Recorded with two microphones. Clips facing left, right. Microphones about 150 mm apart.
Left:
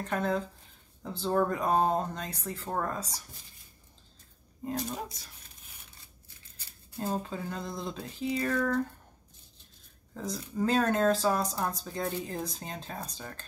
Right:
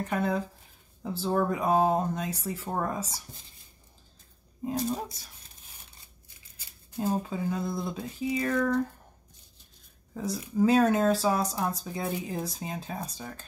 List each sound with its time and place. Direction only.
0.0 s speech: 5° right (ahead or behind)
4.6 s speech: 10° right (ahead or behind)
6.5 s speech: 10° right (ahead or behind)
10.1 s speech: 5° right (ahead or behind)